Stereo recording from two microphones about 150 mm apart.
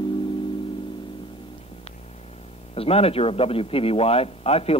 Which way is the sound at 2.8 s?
40° left (ahead or behind).